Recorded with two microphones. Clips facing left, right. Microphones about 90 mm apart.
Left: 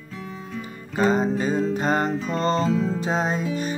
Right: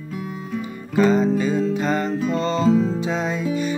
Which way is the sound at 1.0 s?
40° left (ahead or behind).